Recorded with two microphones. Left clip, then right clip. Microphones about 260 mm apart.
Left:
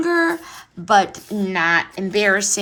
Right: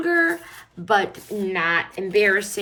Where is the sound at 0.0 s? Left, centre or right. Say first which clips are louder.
Left 2 dB; centre.